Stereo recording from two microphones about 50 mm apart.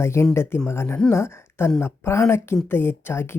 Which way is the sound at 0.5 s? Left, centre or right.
Left.